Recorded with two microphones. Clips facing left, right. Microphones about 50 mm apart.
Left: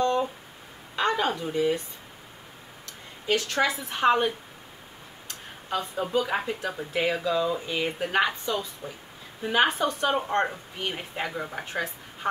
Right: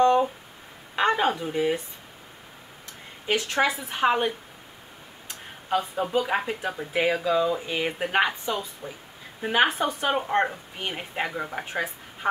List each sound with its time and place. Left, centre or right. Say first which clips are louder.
0.0 s a sound: right 5 dB; right
3.3 s a woman's voice: right 1 dB; right
3.7 s speech: left 1 dB; centre
5.7 s speech: right 3 dB; centre